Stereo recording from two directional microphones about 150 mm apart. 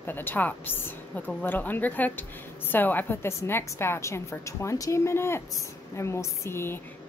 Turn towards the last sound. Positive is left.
turn(degrees=15)  # may be behind; listen again after turning